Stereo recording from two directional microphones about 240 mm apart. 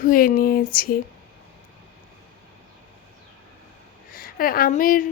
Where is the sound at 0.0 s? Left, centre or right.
Left.